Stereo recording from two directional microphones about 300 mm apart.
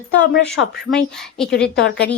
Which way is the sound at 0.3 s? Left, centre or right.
Left.